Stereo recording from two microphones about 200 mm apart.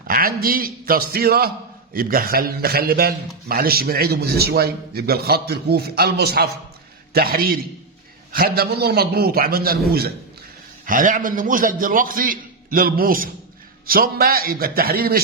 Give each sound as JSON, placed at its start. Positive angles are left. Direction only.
{"t": 0.1, "sound": "a man's voice", "side_deg": -45}